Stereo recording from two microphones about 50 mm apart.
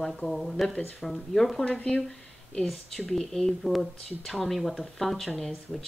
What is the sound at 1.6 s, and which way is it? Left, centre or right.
Speech, left.